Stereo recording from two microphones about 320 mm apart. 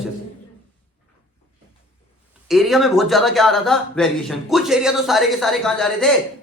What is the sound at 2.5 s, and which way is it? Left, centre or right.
A man's voice, centre.